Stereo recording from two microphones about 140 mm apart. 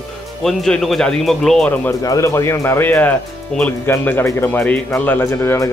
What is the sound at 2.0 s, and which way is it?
Speech, 25° left (ahead or behind).